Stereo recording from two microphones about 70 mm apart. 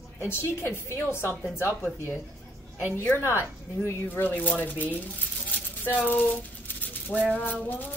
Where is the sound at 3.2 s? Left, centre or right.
Left.